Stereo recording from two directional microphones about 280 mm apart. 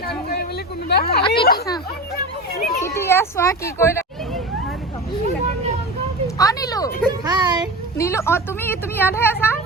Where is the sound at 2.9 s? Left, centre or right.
Centre.